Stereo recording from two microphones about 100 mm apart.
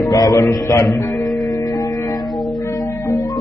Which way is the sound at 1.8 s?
40° left (ahead or behind).